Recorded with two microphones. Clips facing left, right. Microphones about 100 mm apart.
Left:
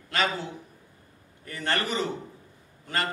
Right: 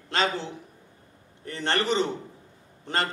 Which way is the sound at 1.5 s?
25° right (ahead or behind).